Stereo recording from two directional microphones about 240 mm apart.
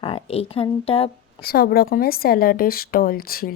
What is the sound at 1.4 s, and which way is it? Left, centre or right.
Speech, left.